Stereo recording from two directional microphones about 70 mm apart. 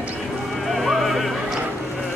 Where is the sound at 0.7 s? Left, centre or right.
Centre.